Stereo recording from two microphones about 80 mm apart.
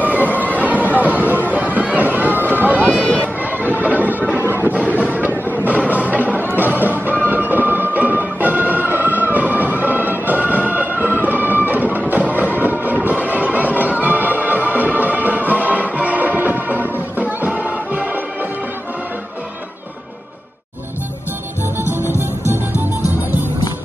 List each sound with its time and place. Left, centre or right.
0.0 s chatter: right
0.6 s a sound: right
7.2 s music: right